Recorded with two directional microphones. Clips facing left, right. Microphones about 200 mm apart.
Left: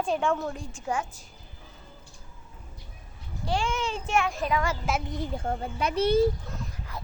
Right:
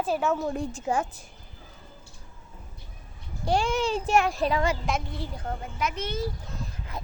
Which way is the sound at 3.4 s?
40° right (ahead or behind).